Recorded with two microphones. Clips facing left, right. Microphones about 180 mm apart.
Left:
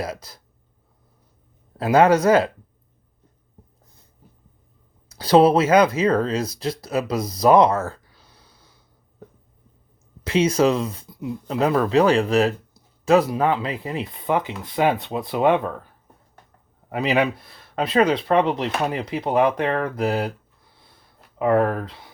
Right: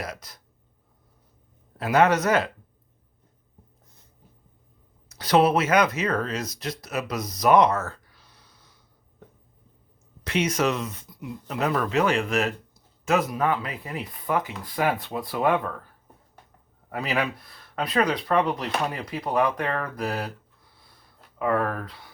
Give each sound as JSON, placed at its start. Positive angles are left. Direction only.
{"t": 0.0, "sound": "speech", "side_deg": 30}
{"t": 1.8, "sound": "speech", "side_deg": 30}
{"t": 5.0, "sound": "speech", "side_deg": 30}
{"t": 10.2, "sound": "speech", "side_deg": 30}
{"t": 16.9, "sound": "speech", "side_deg": 20}
{"t": 21.3, "sound": "speech", "side_deg": 25}